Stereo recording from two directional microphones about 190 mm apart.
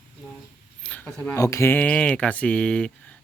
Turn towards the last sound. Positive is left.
turn(degrees=5)  # may be behind; listen again after turning